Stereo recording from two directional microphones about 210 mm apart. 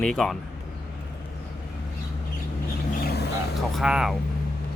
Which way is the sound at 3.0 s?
50° left (ahead or behind).